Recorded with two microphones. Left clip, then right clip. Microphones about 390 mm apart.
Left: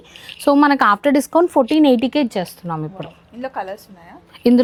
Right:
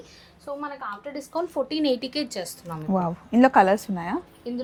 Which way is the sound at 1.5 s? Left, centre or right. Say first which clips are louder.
Left 8 dB; left.